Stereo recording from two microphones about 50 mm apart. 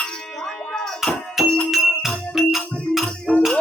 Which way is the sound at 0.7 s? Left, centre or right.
Centre.